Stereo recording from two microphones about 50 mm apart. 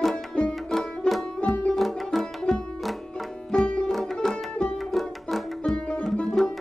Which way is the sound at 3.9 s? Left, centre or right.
Centre.